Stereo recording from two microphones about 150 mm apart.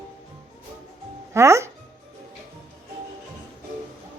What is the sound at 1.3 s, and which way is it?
Speech, 20° right (ahead or behind).